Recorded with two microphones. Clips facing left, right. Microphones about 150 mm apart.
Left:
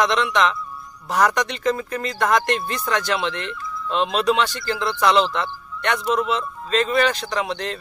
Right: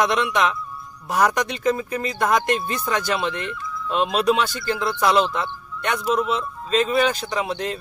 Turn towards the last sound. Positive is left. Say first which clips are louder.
# even
turn(degrees=-5)  # may be behind; listen again after turning